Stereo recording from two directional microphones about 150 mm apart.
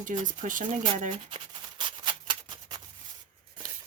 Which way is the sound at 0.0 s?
60° right (ahead or behind).